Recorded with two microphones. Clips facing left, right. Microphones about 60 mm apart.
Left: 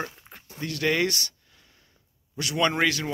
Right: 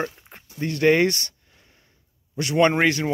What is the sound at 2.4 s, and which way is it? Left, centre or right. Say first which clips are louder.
Speech: right 5 dB; right.